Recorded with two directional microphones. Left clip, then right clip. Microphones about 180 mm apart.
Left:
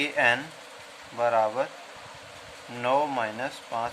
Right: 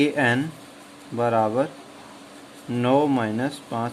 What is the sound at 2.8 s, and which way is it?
Speech, 15° right (ahead or behind).